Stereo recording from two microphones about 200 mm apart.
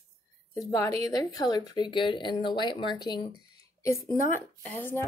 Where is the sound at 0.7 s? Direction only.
15° left (ahead or behind).